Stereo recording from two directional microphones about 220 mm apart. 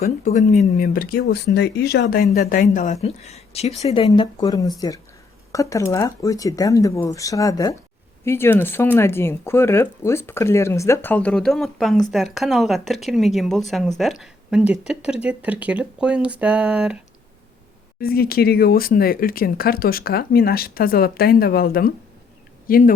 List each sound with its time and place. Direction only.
0.3 s speech: 30° left (ahead or behind); by 17.0 s 5° right (ahead or behind)
18.0 s speech: 45° left (ahead or behind)